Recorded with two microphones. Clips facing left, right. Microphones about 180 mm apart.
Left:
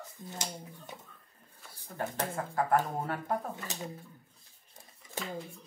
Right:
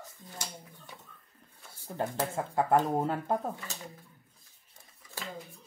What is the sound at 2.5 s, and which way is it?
Speech, 25° right (ahead or behind).